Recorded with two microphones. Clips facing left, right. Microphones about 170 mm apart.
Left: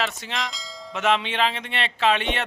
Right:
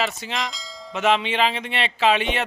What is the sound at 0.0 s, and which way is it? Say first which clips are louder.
Speech: right 2 dB; centre (ahead or behind).